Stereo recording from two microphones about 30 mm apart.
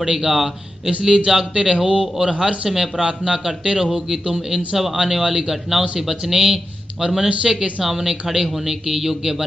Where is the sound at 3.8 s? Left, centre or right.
Centre.